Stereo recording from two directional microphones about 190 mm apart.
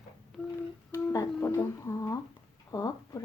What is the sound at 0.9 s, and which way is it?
Speech, 15° left (ahead or behind).